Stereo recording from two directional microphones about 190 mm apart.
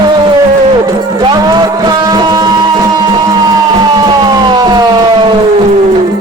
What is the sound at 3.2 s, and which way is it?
Siren, 20° right (ahead or behind).